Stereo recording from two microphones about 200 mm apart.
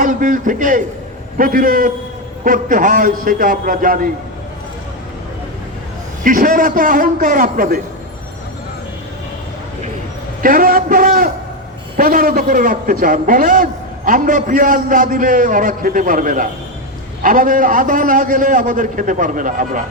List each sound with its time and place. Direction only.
0.0 s a man's voice: 40° right (ahead or behind)
6.2 s a man's voice: 45° right (ahead or behind)
10.4 s a man's voice: 45° right (ahead or behind)